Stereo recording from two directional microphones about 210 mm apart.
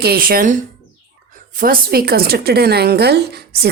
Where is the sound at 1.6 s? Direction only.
45° right (ahead or behind).